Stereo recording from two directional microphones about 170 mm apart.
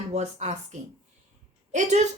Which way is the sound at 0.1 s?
40° right (ahead or behind).